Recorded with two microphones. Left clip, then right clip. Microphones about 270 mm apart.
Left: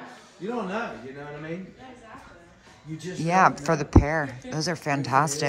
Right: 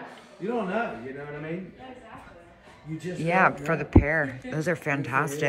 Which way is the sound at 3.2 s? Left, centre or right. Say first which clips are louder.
Left 2 dB; centre.